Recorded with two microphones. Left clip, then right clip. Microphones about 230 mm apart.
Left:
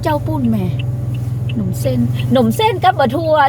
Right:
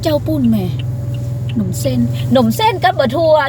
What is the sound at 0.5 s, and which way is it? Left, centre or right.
Speech, centre.